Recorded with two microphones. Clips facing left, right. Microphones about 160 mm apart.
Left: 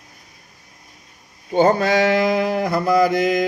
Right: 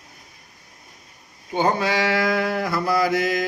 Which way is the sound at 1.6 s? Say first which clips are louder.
Left 6 dB; 45° left (ahead or behind).